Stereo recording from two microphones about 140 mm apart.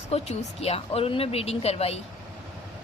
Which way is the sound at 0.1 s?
50° left (ahead or behind).